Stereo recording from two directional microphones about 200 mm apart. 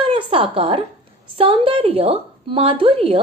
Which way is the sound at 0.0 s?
25° right (ahead or behind).